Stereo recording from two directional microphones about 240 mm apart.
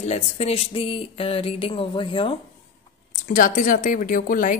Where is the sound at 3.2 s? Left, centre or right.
Left.